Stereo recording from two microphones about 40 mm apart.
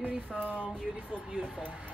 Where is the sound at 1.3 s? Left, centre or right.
Centre.